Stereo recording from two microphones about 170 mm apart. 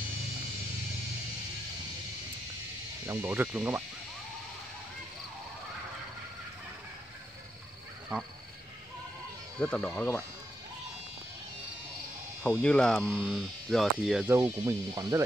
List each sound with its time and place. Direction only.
3.1 s speech: 10° right (ahead or behind)
9.6 s speech: 5° left (ahead or behind)
12.4 s speech: 5° left (ahead or behind)
13.0 s hum: 10° right (ahead or behind)
14.6 s speech: 20° right (ahead or behind)